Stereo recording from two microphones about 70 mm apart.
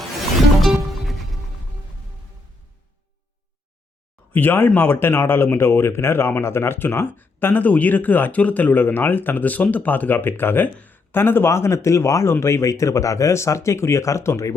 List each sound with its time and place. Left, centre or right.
0.6 s music: centre
4.3 s speech: left